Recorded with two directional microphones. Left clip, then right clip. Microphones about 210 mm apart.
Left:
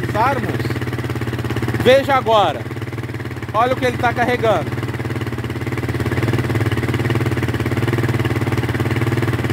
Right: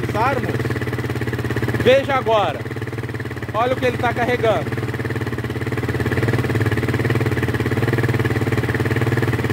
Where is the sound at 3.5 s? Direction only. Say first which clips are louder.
Left 2 dB; 35° left (ahead or behind).